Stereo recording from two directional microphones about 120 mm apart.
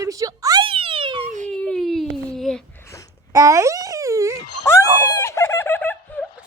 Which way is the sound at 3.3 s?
25° right (ahead or behind).